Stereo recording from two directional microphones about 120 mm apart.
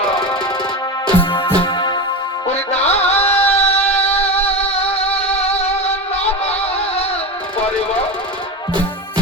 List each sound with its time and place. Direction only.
1.2 s music: 40° left (ahead or behind)
2.5 s music: 60° left (ahead or behind)